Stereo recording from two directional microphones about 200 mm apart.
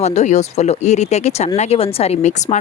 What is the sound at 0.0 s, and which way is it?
Speech, 35° left (ahead or behind).